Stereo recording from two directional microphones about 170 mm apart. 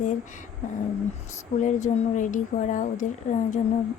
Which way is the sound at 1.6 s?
45° left (ahead or behind).